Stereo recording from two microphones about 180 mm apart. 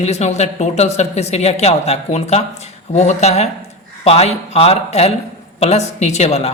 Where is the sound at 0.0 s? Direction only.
40° left (ahead or behind).